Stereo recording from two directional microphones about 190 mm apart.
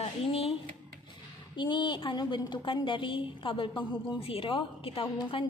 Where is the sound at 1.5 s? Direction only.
25° left (ahead or behind).